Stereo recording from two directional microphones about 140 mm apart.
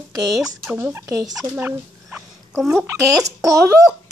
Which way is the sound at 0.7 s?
15° right (ahead or behind).